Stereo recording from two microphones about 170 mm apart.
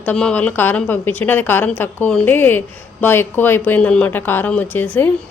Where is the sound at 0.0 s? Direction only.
5° left (ahead or behind).